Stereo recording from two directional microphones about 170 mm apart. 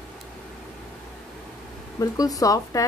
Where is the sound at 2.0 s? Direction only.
20° left (ahead or behind).